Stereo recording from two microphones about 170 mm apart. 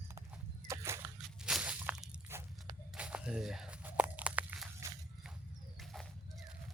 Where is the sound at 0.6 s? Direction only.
15° right (ahead or behind).